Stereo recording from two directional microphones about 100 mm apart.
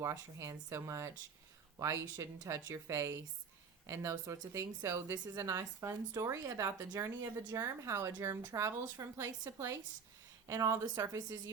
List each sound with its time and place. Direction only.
0.0 s speech: 30° right (ahead or behind)